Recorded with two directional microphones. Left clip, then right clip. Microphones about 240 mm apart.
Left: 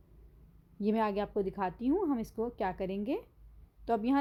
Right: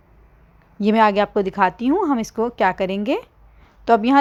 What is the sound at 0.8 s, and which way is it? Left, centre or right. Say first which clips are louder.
A woman's voice: right 16 dB; centre.